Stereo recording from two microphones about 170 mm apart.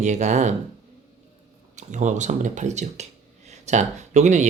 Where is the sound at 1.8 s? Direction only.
45° right (ahead or behind).